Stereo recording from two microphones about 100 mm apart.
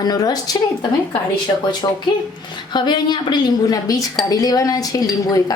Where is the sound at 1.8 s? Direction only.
50° left (ahead or behind).